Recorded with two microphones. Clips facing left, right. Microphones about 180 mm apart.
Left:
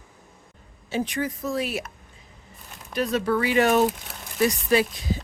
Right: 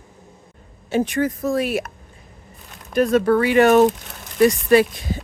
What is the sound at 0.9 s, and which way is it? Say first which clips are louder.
Speech: right 7 dB; 50° right (ahead or behind).